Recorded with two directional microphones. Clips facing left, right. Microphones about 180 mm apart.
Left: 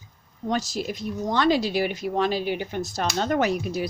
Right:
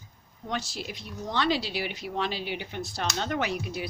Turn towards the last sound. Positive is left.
turn(degrees=45)  # may be behind; listen again after turning